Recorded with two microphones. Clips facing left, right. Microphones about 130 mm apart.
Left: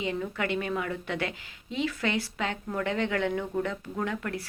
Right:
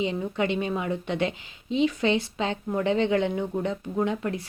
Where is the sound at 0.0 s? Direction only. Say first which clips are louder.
Right 4 dB; 20° right (ahead or behind).